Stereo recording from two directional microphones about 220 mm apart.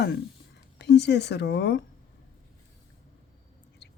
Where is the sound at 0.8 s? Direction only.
50° left (ahead or behind).